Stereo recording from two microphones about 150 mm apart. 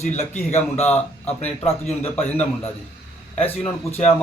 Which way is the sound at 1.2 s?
45° left (ahead or behind).